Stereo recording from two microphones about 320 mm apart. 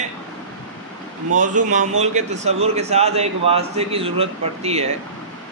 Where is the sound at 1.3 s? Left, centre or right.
Right.